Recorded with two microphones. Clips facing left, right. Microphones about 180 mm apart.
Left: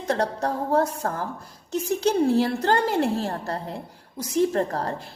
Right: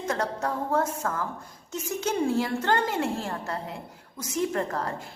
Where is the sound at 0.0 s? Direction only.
35° left (ahead or behind).